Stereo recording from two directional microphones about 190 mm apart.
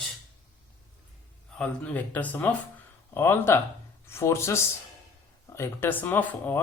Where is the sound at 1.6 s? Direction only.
10° left (ahead or behind).